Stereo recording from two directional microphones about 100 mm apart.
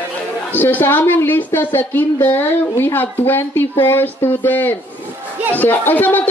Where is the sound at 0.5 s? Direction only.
20° left (ahead or behind).